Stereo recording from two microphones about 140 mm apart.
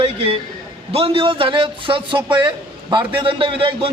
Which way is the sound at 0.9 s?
40° right (ahead or behind).